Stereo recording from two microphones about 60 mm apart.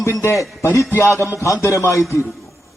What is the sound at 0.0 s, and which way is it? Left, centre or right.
Speech, left.